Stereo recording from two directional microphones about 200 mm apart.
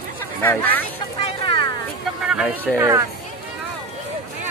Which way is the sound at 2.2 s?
5° right (ahead or behind).